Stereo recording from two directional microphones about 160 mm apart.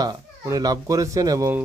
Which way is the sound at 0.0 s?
25° right (ahead or behind).